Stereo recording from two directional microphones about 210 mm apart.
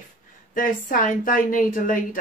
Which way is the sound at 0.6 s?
40° left (ahead or behind).